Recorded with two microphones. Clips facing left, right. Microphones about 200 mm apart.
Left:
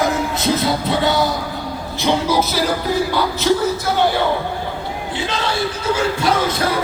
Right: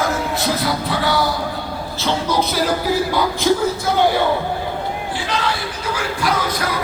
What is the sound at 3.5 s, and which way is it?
Speech, 10° right (ahead or behind).